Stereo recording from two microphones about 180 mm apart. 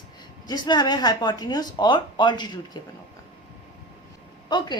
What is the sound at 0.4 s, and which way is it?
A woman's voice, 25° left (ahead or behind).